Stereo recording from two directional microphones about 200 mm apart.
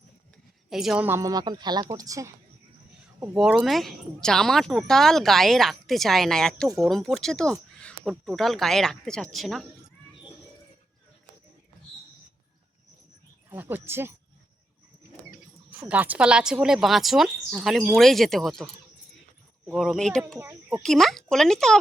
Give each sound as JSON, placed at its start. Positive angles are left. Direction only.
{"t": 0.7, "sound": "a woman's voice", "side_deg": 0}
{"t": 3.3, "sound": "speech", "side_deg": 0}
{"t": 13.5, "sound": "a woman's voice", "side_deg": -10}
{"t": 15.7, "sound": "speech", "side_deg": -5}
{"t": 19.7, "sound": "speech", "side_deg": 0}
{"t": 20.4, "sound": "speech", "side_deg": -10}
{"t": 20.8, "sound": "speech", "side_deg": 0}